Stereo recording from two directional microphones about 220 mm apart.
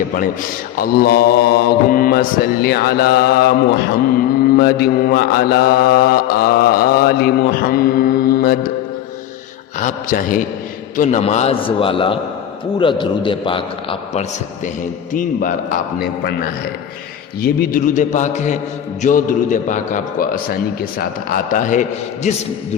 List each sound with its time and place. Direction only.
0.8 s mantra: 45° left (ahead or behind)
9.7 s a man's voice: 35° left (ahead or behind)
17.4 s a man's voice: 40° left (ahead or behind)